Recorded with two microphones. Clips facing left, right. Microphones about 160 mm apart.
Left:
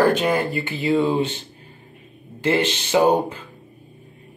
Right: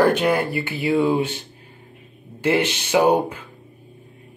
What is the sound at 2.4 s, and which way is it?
Speech, 15° right (ahead or behind).